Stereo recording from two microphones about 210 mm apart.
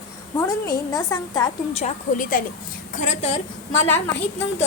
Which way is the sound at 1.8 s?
40° left (ahead or behind).